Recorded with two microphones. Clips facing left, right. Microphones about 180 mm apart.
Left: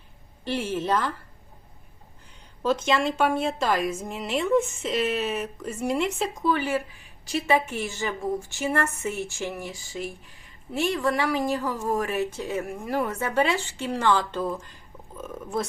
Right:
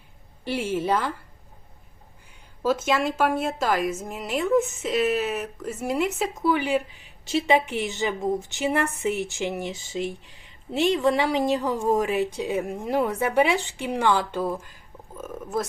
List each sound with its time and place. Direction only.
0.4 s a woman's voice: 10° right (ahead or behind)
2.3 s a woman's voice: 5° right (ahead or behind)
6.5 s a woman's voice: 15° right (ahead or behind)